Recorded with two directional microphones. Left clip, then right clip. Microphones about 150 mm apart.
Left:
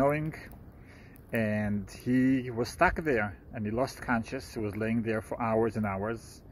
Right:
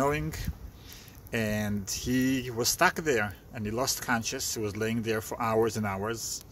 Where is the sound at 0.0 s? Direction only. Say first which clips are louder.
Left 1 dB; 20° right (ahead or behind).